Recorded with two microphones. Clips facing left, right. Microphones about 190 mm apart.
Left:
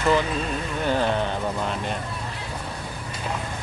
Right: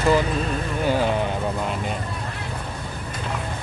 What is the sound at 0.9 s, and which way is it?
Speech, 10° right (ahead or behind).